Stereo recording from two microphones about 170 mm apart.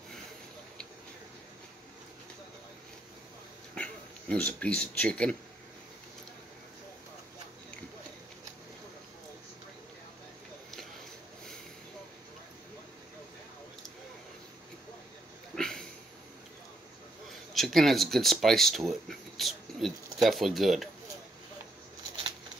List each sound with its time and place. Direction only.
3.7 s speech: 5° left (ahead or behind)
15.5 s a sound: 5° left (ahead or behind)
17.6 s speech: centre (ahead or behind)